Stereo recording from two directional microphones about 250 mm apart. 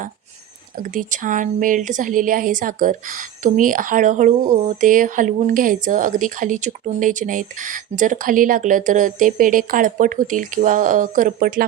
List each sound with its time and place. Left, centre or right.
0.8 s a woman's voice: right